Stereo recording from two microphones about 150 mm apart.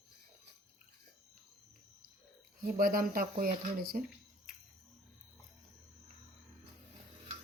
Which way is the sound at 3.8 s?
85° right.